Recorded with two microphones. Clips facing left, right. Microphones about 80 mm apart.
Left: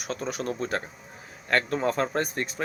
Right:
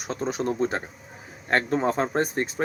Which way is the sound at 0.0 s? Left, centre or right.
Right.